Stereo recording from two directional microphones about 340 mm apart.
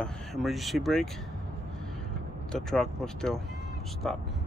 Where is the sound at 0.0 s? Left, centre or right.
Centre.